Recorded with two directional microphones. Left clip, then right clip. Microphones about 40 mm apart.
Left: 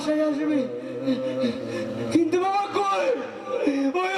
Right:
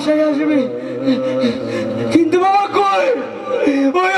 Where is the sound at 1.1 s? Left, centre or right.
Right.